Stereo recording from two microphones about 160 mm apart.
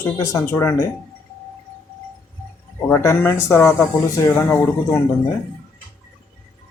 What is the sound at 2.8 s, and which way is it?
Speech, 15° left (ahead or behind).